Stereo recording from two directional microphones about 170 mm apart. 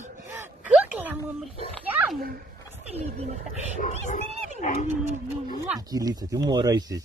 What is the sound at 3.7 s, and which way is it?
Speech, 50° left (ahead or behind).